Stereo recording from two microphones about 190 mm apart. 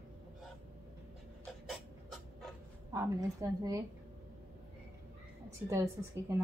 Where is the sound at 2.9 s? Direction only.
15° right (ahead or behind).